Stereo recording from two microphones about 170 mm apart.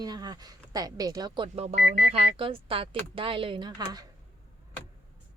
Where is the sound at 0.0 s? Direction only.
25° right (ahead or behind).